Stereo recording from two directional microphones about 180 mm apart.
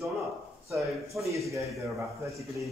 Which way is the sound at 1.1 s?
15° right (ahead or behind).